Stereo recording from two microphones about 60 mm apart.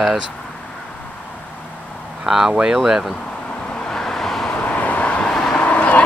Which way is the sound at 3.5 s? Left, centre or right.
Centre.